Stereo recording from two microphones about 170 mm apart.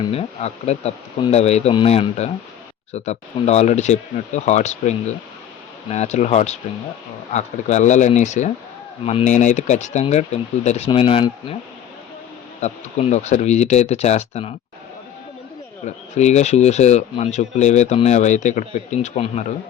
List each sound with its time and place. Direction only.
0.1 s speech: 35° left (ahead or behind)
12.6 s speech: 40° left (ahead or behind)
16.1 s speech: 40° left (ahead or behind)